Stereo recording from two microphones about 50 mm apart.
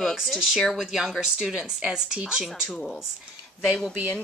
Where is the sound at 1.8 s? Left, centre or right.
Centre.